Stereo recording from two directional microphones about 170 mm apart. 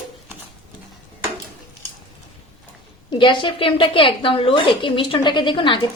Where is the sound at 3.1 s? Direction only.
30° left (ahead or behind).